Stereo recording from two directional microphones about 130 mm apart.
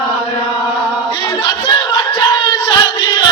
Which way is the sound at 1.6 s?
40° left (ahead or behind).